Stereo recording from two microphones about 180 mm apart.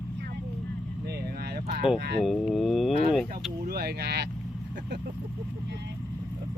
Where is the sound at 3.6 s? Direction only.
60° right (ahead or behind).